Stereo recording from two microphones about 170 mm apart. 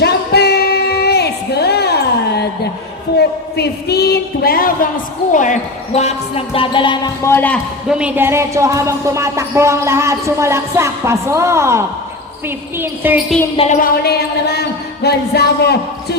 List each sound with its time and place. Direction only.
0.0 s singing: 75° left (ahead or behind)
3.2 s a woman's voice: 75° left (ahead or behind); by 4.9 s 60° left (ahead or behind)
5.3 s speech: 50° left (ahead or behind); by 7.1 s 30° left (ahead or behind)
7.3 s a man's voice: 10° left (ahead or behind)
7.9 s a woman's voice: 5° right (ahead or behind)
12.8 s a woman's voice: 10° right (ahead or behind)
13.6 s a sound: 45° left (ahead or behind); by 14.6 s 70° left (ahead or behind)
15.0 s a man's voice: 70° left (ahead or behind)